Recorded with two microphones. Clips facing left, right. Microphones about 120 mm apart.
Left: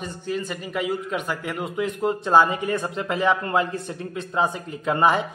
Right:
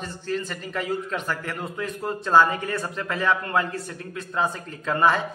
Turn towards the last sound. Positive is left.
turn(degrees=15)  # may be behind; listen again after turning